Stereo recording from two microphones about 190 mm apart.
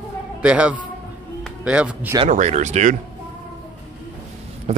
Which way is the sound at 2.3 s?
40° right (ahead or behind).